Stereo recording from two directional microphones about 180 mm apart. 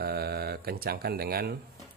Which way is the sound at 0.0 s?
60° right (ahead or behind).